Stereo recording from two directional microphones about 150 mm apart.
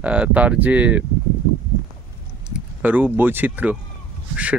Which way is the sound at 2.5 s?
10° right (ahead or behind).